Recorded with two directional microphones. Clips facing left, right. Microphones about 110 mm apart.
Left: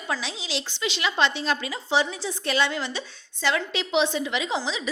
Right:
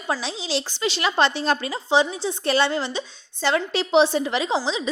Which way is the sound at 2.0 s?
30° right (ahead or behind).